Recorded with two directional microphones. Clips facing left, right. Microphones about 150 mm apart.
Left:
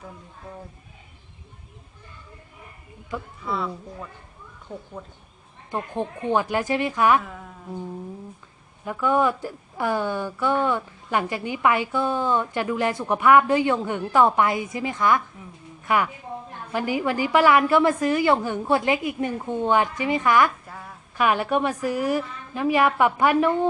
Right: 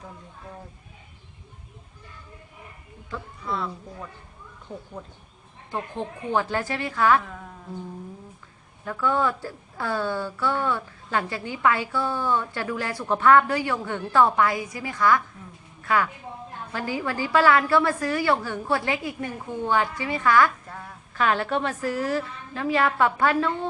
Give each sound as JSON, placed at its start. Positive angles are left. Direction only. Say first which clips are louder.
{"t": 3.4, "sound": "speech", "louder": "left 1 dB", "side_deg": 0}
{"t": 5.7, "sound": "a woman's voice", "louder": "left 3 dB", "side_deg": 15}
{"t": 8.8, "sound": "a woman's voice", "louder": "left 3 dB", "side_deg": 15}
{"t": 20.7, "sound": "a woman's voice", "louder": "even", "side_deg": 5}
{"t": 21.2, "sound": "a woman's voice", "louder": "left 2 dB", "side_deg": 15}